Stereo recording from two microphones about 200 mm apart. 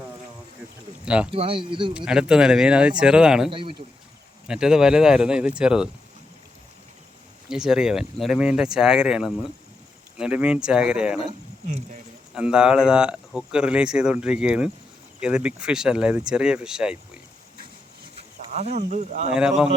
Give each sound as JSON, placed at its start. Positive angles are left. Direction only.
{"t": 1.0, "sound": "speech", "side_deg": -5}
{"t": 1.3, "sound": "speech", "side_deg": -25}
{"t": 2.0, "sound": "speech", "side_deg": -5}
{"t": 3.5, "sound": "speech", "side_deg": -25}
{"t": 4.4, "sound": "speech", "side_deg": -5}
{"t": 7.4, "sound": "speech", "side_deg": -5}
{"t": 12.3, "sound": "speech", "side_deg": -5}
{"t": 18.2, "sound": "a sound", "side_deg": -35}
{"t": 18.9, "sound": "speech", "side_deg": -35}
{"t": 19.3, "sound": "speech", "side_deg": -5}